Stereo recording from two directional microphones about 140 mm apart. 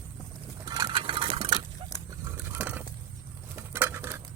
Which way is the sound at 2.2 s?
15° right (ahead or behind).